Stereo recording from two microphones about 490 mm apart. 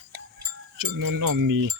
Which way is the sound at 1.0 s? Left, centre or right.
Right.